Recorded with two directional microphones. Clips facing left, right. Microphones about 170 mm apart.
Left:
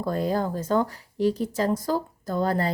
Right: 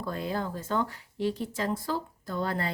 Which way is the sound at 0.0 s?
40° left (ahead or behind).